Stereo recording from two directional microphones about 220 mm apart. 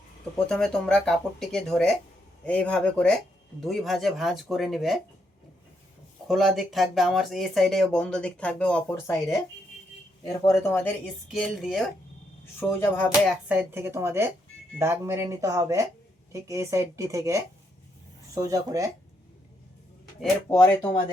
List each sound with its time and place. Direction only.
0.3 s speech: 5° left (ahead or behind)
6.2 s speech: centre (ahead or behind)
11.3 s speech: centre (ahead or behind)
13.2 s speech: 5° right (ahead or behind)
20.5 s speech: 15° left (ahead or behind)